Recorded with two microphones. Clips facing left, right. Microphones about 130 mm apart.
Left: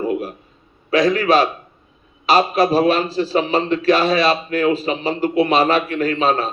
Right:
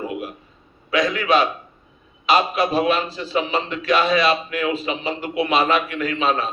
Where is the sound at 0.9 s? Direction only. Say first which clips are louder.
Left 4 dB; 35° left (ahead or behind).